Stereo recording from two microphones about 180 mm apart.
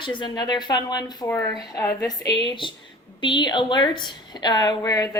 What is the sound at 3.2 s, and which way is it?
A woman's voice, 25° left (ahead or behind).